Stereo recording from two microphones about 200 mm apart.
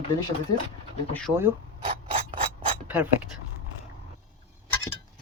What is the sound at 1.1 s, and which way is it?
Speech, 5° left (ahead or behind).